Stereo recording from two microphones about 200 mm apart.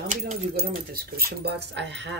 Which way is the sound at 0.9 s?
50° right (ahead or behind).